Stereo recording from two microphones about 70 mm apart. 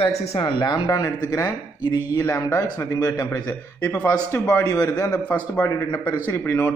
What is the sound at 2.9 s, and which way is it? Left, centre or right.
Speech, left.